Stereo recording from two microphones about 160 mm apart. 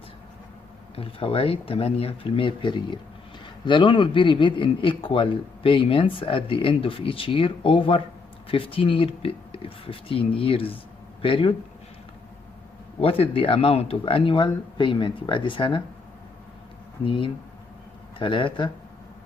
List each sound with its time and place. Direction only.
0.9 s a man's voice: 35° left (ahead or behind)
13.0 s a man's voice: 35° left (ahead or behind)
17.0 s a man's voice: 35° left (ahead or behind)